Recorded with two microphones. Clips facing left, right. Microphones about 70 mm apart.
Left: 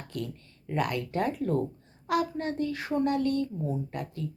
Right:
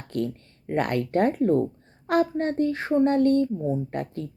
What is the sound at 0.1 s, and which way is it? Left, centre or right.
A child's voice, right.